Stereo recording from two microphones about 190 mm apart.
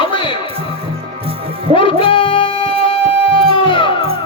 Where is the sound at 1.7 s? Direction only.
30° left (ahead or behind).